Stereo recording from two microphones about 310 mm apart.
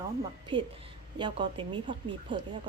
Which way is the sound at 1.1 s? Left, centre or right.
Centre.